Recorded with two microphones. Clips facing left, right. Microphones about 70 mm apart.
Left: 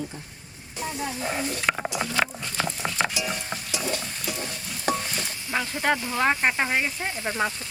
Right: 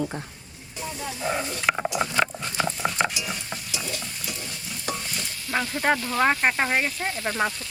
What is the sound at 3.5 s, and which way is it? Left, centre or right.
Stir, centre.